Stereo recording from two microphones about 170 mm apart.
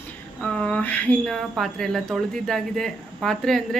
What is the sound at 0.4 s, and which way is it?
Speech, 5° left (ahead or behind).